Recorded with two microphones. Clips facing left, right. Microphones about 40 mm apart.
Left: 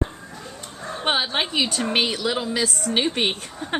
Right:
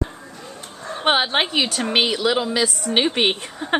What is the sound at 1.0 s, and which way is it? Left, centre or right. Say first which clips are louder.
A woman's voice: right 4 dB; right.